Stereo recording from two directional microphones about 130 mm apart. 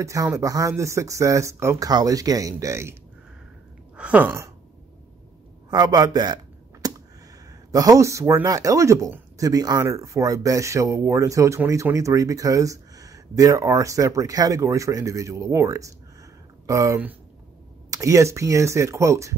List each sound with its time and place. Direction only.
0.0 s speech: 25° right (ahead or behind)
3.9 s a sound: 10° right (ahead or behind)
5.7 s computer keyboard: 30° right (ahead or behind)
7.7 s speech: 25° right (ahead or behind)